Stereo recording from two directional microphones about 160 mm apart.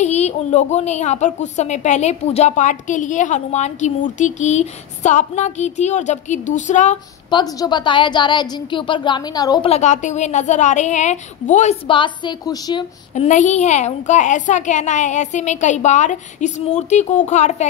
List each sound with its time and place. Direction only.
0.0 s a woman's voice: 45° left (ahead or behind)
7.2 s a woman's voice: 25° left (ahead or behind)
9.7 s a woman's voice: 45° left (ahead or behind)
11.9 s a woman's voice: 30° left (ahead or behind)
13.1 s a woman's voice: 50° left (ahead or behind)